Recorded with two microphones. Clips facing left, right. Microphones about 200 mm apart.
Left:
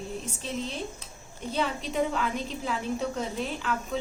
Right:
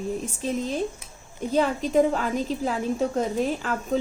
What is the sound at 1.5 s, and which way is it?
A woman's voice, 45° right (ahead or behind).